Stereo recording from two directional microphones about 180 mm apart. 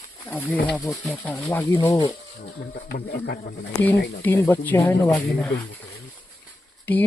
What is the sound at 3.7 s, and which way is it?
Speech, 10° left (ahead or behind).